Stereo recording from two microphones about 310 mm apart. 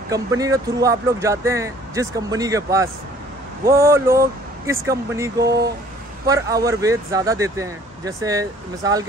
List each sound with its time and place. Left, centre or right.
0.1 s speech: centre